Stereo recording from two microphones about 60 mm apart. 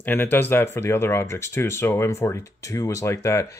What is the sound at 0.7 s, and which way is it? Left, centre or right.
Speech, left.